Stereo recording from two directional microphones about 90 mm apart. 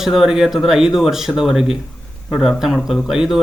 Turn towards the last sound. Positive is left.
turn(degrees=-5)  # may be behind; listen again after turning